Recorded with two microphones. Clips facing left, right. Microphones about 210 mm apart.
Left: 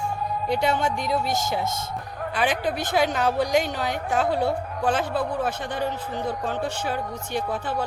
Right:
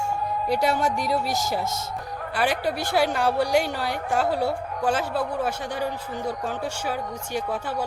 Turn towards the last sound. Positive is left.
turn(degrees=-10)  # may be behind; listen again after turning